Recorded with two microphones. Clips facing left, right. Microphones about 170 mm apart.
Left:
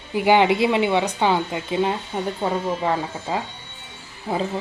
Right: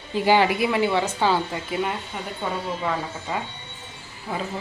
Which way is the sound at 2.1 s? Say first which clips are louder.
Left 8 dB; 35° left (ahead or behind).